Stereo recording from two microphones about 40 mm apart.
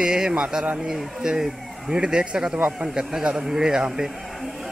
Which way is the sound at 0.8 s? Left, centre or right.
Centre.